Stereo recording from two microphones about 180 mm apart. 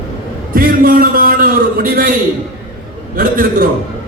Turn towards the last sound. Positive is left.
turn(degrees=-50)  # may be behind; listen again after turning